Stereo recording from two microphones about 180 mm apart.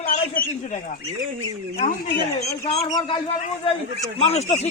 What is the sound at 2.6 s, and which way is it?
Speech, 35° left (ahead or behind).